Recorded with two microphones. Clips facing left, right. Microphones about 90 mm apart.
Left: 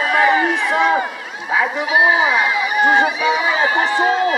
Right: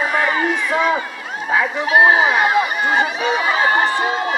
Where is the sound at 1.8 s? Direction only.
45° right (ahead or behind).